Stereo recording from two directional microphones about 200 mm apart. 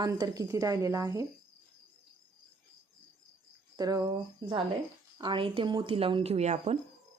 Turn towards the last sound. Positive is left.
turn(degrees=-30)  # may be behind; listen again after turning